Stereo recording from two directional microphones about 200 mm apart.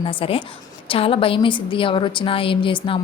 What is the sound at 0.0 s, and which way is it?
A woman's voice, 25° left (ahead or behind).